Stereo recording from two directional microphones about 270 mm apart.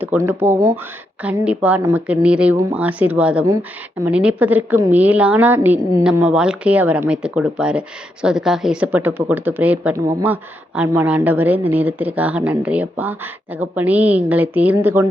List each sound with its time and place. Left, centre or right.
0.0 s a woman's voice: centre